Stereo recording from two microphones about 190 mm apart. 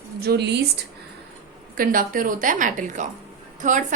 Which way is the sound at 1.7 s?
50° right (ahead or behind).